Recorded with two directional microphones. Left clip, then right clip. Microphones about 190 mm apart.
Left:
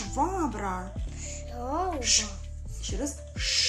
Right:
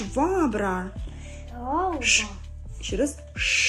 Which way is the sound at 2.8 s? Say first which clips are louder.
Right 8 dB; 20° right (ahead or behind).